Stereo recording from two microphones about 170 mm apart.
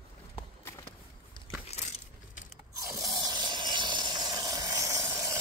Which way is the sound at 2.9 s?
20° right (ahead or behind).